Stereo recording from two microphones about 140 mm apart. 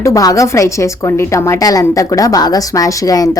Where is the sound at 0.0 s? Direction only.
25° left (ahead or behind).